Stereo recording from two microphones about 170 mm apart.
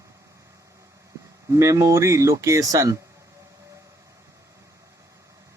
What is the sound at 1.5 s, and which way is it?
Speech, 20° right (ahead or behind).